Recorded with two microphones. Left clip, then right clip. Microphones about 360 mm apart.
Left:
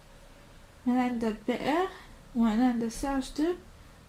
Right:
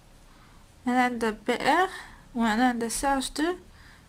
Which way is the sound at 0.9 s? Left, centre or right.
Right.